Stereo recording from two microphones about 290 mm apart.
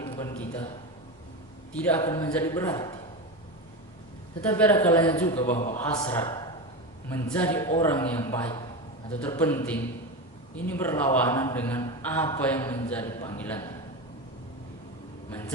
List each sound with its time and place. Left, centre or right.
0.0 s a sound: centre
1.7 s a man's voice: centre
4.4 s a man's voice: centre
5.5 s a man's voice: left
5.8 s a man's voice: centre